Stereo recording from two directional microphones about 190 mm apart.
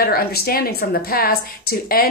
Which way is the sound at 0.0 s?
55° left (ahead or behind).